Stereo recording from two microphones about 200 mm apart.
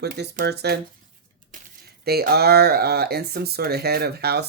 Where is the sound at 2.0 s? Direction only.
50° right (ahead or behind).